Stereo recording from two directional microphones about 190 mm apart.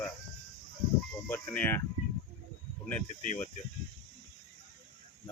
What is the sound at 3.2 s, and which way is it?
Speech, 45° left (ahead or behind).